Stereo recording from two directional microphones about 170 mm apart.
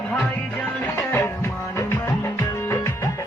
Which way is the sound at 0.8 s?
15° left (ahead or behind).